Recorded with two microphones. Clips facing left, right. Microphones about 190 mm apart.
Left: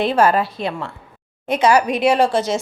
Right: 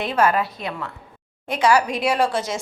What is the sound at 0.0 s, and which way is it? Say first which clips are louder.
A woman's voice: left 4 dB; 30° left (ahead or behind).